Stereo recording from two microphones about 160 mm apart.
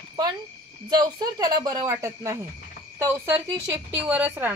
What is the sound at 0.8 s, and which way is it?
Speech, 25° right (ahead or behind).